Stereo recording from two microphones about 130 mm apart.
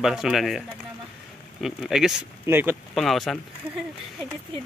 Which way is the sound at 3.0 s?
Centre (ahead or behind).